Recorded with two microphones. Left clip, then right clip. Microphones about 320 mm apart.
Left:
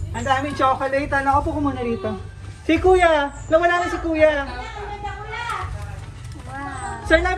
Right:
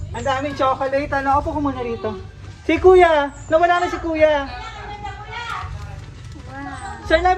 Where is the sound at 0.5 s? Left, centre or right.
Centre.